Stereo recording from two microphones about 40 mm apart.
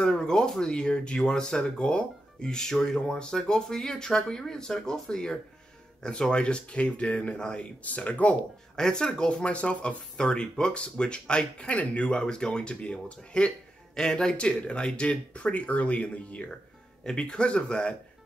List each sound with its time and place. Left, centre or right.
0.0 s speech: centre
7.8 s speech: left
8.7 s speech: centre